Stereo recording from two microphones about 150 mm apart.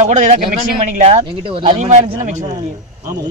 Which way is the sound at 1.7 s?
50° right (ahead or behind).